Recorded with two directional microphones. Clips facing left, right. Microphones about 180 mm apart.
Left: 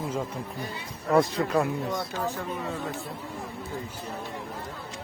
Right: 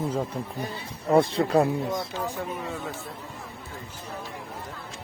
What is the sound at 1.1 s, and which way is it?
Speech, 30° right (ahead or behind).